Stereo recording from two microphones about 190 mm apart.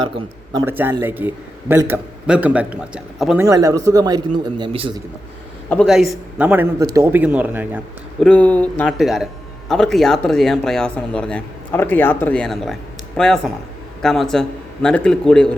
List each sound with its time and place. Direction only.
0.5 s a man's voice: 10° right (ahead or behind)
3.4 s speech: 15° right (ahead or behind)
5.6 s a man's voice: 5° left (ahead or behind)
8.2 s speech: 5° left (ahead or behind)